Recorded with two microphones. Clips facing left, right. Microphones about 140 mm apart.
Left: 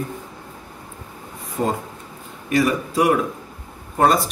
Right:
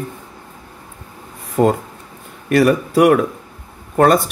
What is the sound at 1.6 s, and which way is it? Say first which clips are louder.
Speech: right 8 dB; 75° right (ahead or behind).